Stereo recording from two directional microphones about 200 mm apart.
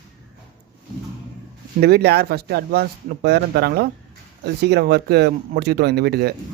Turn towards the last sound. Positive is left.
turn(degrees=-55)  # may be behind; listen again after turning